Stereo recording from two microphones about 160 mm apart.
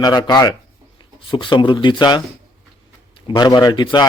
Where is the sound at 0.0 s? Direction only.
25° left (ahead or behind).